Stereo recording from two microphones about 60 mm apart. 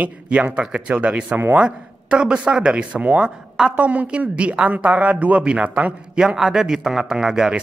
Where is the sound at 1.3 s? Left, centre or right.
Right.